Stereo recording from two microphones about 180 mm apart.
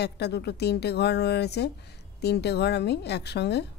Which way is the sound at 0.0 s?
65° left (ahead or behind).